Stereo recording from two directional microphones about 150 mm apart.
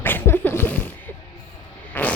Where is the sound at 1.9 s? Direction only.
10° left (ahead or behind).